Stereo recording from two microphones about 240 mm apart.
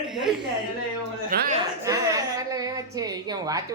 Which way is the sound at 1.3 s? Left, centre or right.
Right.